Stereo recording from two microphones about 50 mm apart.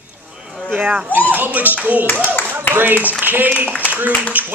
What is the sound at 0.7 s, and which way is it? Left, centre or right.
Speech, right.